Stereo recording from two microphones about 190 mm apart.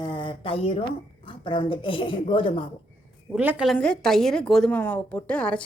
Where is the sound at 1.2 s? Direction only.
25° left (ahead or behind).